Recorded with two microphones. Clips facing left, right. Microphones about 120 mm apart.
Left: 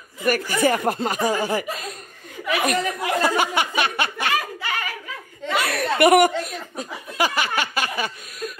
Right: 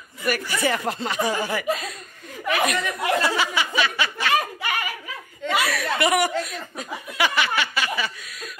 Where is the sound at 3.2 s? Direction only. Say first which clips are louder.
Left 3 dB; 50° left (ahead or behind).